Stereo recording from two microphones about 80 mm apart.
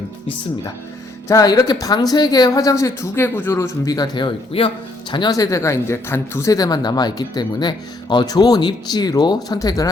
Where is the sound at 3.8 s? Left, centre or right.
Left.